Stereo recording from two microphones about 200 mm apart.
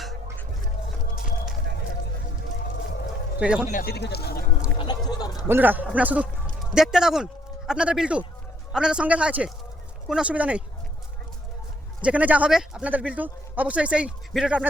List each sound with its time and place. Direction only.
3.3 s speech: 5° right (ahead or behind)
3.7 s speech: 45° left (ahead or behind)
4.8 s speech: 20° left (ahead or behind)
5.5 s speech: 10° right (ahead or behind)
12.0 s speech: 5° right (ahead or behind)